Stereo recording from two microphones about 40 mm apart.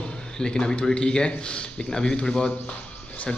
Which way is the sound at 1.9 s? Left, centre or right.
Centre.